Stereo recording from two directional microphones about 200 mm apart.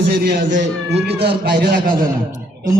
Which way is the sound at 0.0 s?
50° right (ahead or behind).